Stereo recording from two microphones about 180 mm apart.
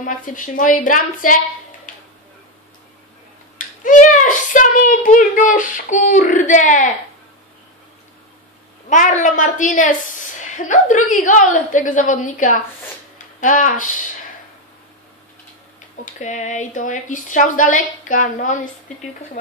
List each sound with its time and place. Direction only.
0.0 s a child's voice: 45° left (ahead or behind)
3.5 s a child's voice: 45° left (ahead or behind)
8.8 s a child's voice: 45° left (ahead or behind)
16.2 s a child's voice: 40° left (ahead or behind)